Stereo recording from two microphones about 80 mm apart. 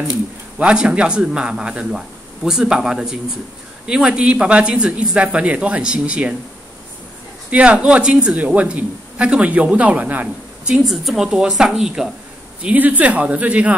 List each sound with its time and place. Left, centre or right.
0.6 s speech: centre
7.5 s speech: centre
10.8 s speech: centre
12.6 s speech: right